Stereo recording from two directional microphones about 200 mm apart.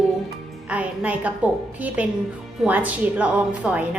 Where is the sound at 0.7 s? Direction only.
5° right (ahead or behind).